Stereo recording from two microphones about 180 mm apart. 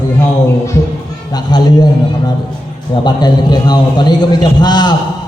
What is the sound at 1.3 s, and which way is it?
Speech, 20° left (ahead or behind).